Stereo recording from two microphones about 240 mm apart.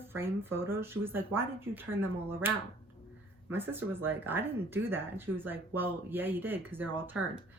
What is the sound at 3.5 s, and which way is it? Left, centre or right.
A woman's voice, centre.